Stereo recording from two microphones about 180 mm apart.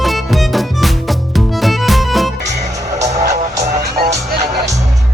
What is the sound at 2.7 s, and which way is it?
Music, 20° right (ahead or behind).